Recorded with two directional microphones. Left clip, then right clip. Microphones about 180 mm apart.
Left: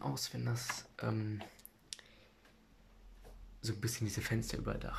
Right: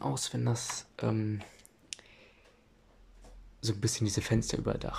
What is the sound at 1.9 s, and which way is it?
Clicking, 10° right (ahead or behind).